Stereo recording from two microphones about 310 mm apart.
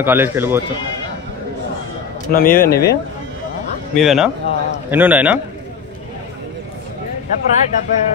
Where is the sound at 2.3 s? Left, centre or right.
Left.